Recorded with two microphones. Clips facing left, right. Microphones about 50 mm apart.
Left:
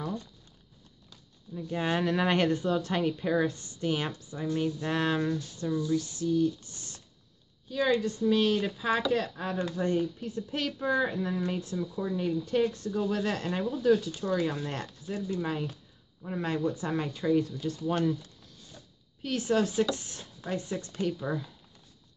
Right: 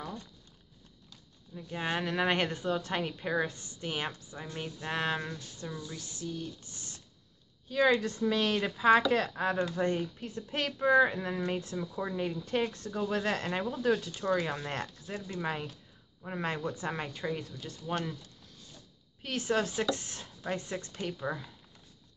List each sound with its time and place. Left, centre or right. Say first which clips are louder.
1.5 s speech: left 4 dB; centre
7.7 s speech: even; right
19.2 s speech: left 3 dB; right
21.1 s speech: left 3 dB; centre